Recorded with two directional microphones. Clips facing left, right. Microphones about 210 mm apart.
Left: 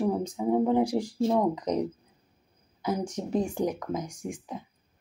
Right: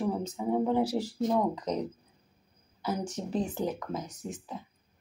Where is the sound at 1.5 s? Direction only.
10° left (ahead or behind).